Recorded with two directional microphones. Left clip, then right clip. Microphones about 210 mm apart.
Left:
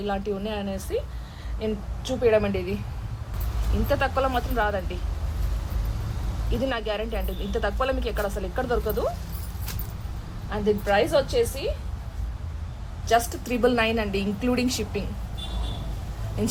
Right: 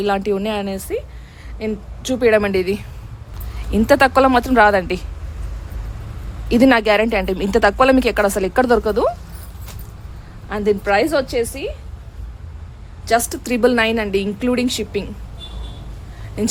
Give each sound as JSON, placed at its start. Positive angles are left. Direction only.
{"t": 0.0, "sound": "a woman's voice", "side_deg": -55}
{"t": 3.8, "sound": "a woman's voice", "side_deg": -55}
{"t": 6.5, "sound": "a woman's voice", "side_deg": -55}
{"t": 10.5, "sound": "a woman's voice", "side_deg": -55}
{"t": 13.1, "sound": "a woman's voice", "side_deg": -55}